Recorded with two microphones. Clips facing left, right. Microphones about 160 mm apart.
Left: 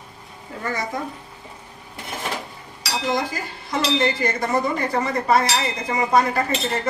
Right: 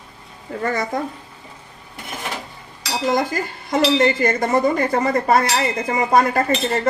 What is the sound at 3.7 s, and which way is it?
Cutlery, 50° right (ahead or behind).